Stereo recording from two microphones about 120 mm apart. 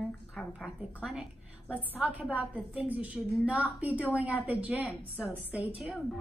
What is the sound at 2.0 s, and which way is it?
A woman's voice, 10° right (ahead or behind).